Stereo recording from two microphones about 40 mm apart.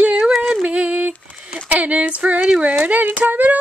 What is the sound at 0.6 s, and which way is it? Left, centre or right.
Speech, right.